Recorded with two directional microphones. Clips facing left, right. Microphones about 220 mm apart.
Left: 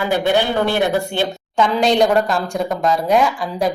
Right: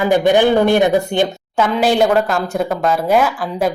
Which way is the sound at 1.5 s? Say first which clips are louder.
Right 1 dB; 5° right (ahead or behind).